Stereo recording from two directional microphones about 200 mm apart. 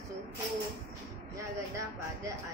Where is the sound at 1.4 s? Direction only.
15° right (ahead or behind).